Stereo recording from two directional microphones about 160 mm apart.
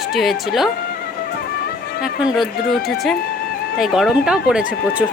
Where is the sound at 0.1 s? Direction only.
Centre (ahead or behind).